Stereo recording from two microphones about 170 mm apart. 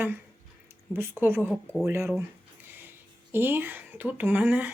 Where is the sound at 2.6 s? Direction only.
10° right (ahead or behind).